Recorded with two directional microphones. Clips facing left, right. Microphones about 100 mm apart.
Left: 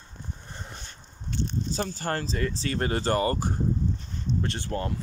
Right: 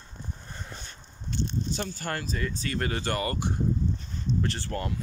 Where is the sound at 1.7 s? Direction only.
35° left (ahead or behind).